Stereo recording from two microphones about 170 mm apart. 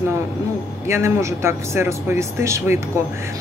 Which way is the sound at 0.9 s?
15° right (ahead or behind).